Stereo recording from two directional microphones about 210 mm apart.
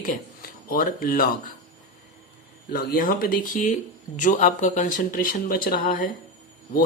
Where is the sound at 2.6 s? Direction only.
45° left (ahead or behind).